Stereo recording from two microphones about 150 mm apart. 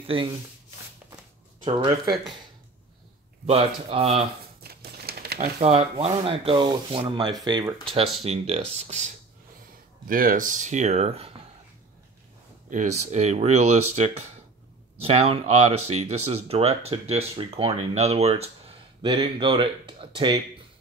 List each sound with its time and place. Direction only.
0.0 s speech: 35° right (ahead or behind)
1.6 s rub: 35° right (ahead or behind)
3.4 s speech: 40° right (ahead or behind)
4.6 s a sound: 90° right
5.6 s rub: 40° right (ahead or behind)
8.2 s speech: 40° right (ahead or behind)
10.0 s speech: 70° right (ahead or behind); by 11.3 s 40° right (ahead or behind)
12.6 s speech: 55° right (ahead or behind)
19.0 s rub: 30° right (ahead or behind)